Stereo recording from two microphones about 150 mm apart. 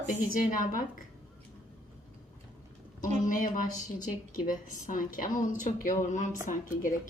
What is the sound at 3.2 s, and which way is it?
A woman's voice, 60° left (ahead or behind).